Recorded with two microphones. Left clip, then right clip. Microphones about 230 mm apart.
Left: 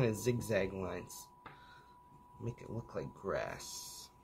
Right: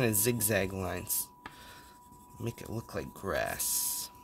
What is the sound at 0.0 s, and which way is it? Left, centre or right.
Speech, right.